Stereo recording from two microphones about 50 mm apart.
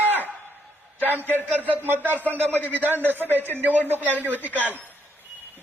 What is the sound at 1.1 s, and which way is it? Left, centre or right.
A man's voice, right.